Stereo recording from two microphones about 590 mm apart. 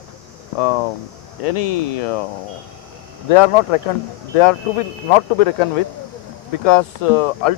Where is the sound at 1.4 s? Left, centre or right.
Left.